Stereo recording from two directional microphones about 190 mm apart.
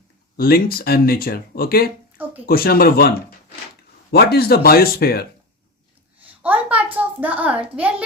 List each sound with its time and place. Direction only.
0.3 s speech: 50° left (ahead or behind)
6.4 s a child's voice: 10° right (ahead or behind)